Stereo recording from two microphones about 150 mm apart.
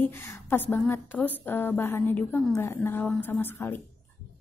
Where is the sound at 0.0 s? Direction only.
15° left (ahead or behind).